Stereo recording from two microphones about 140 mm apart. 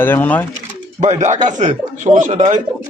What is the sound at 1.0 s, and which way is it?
Speech, 55° right (ahead or behind).